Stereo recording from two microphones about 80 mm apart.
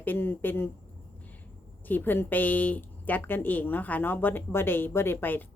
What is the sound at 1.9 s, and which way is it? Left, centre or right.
A woman's voice, left.